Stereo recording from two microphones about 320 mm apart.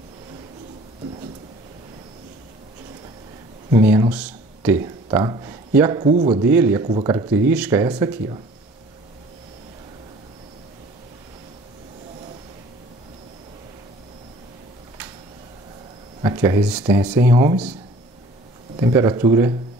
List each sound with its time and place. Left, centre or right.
3.7 s a man's voice: centre
6.4 s speech: centre
16.2 s speech: centre
18.8 s speech: centre